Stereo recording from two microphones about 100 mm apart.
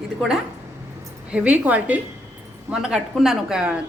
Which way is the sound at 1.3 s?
15° right (ahead or behind).